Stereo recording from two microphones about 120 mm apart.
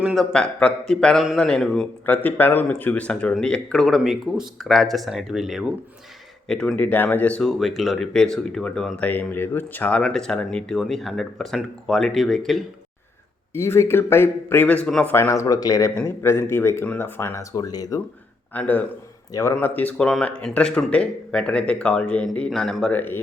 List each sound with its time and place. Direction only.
0.0 s speech: centre (ahead or behind)
7.4 s speech: centre (ahead or behind)
13.5 s speech: 20° left (ahead or behind)
14.8 s speech: 5° left (ahead or behind)
15.1 s speech: 25° left (ahead or behind)
18.5 s speech: 15° left (ahead or behind)
19.3 s speech: 25° left (ahead or behind)
19.5 s speech: 15° left (ahead or behind)